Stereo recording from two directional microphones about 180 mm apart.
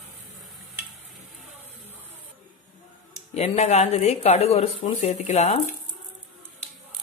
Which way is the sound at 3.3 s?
40° left (ahead or behind).